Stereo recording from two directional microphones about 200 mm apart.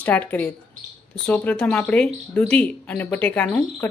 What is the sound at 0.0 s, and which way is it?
Speech, 10° left (ahead or behind).